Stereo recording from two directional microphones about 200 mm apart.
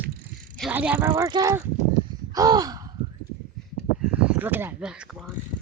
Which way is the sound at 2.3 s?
20° right (ahead or behind).